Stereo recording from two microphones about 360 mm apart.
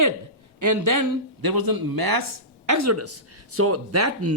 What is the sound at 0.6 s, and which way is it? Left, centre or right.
Speech, right.